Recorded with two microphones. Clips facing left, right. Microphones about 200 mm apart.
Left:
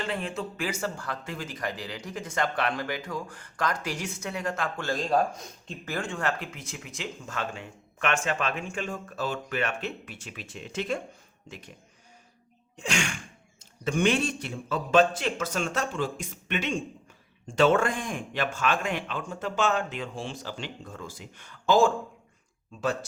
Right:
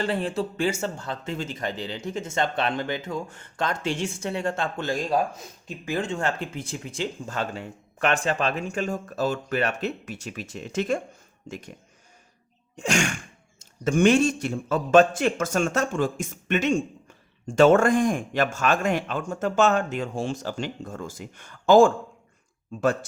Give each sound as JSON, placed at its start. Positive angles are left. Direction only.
{"t": 0.0, "sound": "speech", "side_deg": -35}
{"t": 4.9, "sound": "a man's voice", "side_deg": -10}
{"t": 12.7, "sound": "a man's voice", "side_deg": -45}